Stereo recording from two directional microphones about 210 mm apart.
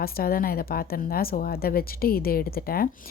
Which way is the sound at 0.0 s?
45° left (ahead or behind).